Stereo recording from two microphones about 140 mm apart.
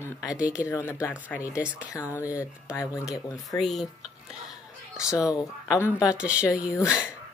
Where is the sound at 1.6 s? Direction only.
10° right (ahead or behind).